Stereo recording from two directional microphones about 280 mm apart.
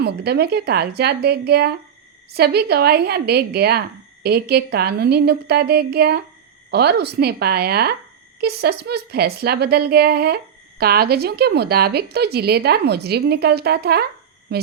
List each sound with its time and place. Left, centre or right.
0.0 s a woman's voice: right